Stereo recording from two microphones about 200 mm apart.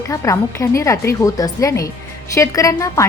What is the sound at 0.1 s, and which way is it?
A woman's voice, 15° left (ahead or behind).